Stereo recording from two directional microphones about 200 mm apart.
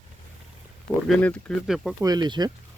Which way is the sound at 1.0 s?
5° left (ahead or behind).